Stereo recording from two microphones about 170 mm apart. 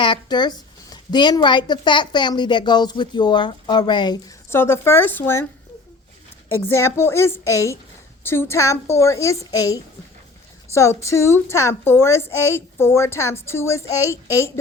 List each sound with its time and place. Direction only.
0.0 s speech: 25° left (ahead or behind)
4.4 s a woman's voice: 15° left (ahead or behind)
6.7 s a woman's voice: 15° left (ahead or behind)